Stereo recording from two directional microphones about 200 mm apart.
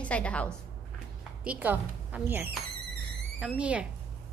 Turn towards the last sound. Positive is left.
turn(degrees=-5)  # may be behind; listen again after turning